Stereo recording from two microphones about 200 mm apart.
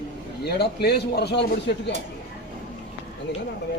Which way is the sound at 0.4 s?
55° left (ahead or behind).